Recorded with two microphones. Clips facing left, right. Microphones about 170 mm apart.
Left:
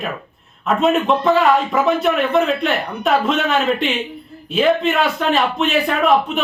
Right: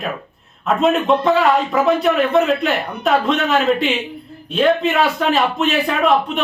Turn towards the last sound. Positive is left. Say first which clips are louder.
# even
turn(degrees=0)  # may be behind; listen again after turning